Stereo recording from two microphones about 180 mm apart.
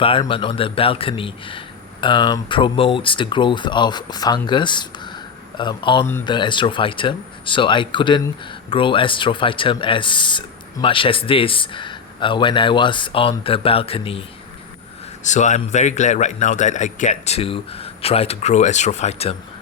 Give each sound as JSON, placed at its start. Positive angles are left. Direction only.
{"t": 0.0, "sound": "speech", "side_deg": 30}
{"t": 15.2, "sound": "a man's voice", "side_deg": 40}